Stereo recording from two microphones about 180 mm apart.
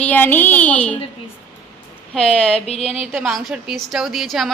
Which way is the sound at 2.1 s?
5° left (ahead or behind).